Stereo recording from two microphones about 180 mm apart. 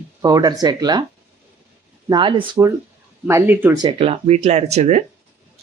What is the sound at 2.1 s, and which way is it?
Speech, 30° right (ahead or behind).